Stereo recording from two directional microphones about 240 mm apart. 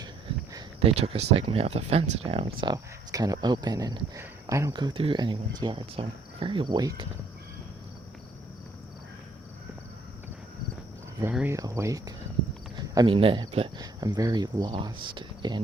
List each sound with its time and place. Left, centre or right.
0.5 s speech: right
11.2 s speech: centre